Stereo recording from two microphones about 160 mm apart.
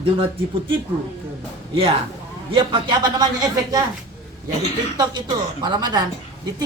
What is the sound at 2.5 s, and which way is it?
A man's voice, 30° right (ahead or behind).